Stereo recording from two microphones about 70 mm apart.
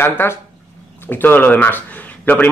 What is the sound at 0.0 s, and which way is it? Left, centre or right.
Speech, left.